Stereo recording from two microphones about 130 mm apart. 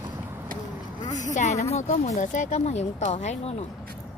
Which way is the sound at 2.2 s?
70° left (ahead or behind).